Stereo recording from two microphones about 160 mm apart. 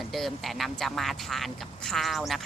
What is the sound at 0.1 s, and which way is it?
Speech, centre (ahead or behind).